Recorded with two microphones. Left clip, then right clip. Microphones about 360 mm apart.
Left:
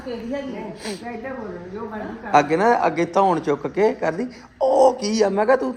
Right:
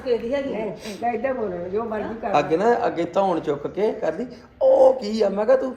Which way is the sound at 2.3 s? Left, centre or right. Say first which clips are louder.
Left 3 dB; centre.